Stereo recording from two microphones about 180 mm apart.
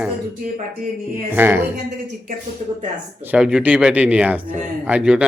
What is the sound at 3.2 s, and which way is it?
A man's voice, 5° right (ahead or behind).